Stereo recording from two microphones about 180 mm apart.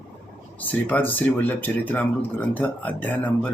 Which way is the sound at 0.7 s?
10° left (ahead or behind).